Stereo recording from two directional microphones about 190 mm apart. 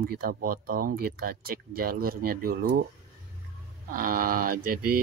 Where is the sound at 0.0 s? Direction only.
50° right (ahead or behind).